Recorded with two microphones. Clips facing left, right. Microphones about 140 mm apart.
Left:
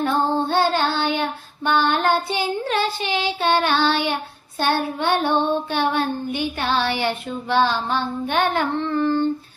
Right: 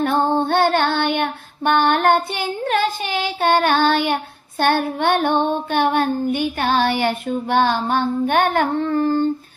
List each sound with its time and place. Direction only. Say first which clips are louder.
0.0 s child singing: right 2 dB; 55° right (ahead or behind)